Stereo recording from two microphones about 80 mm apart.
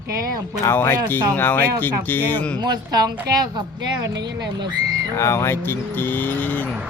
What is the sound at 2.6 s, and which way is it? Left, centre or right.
A woman's voice, right.